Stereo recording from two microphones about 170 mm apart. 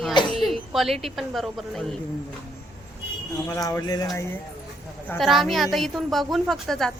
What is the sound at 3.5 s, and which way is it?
Speech, 20° left (ahead or behind).